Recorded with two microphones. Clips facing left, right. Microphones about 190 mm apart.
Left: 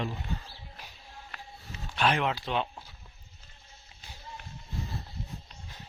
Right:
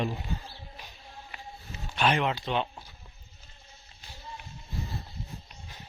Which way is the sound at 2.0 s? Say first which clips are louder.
Right 1 dB; centre (ahead or behind).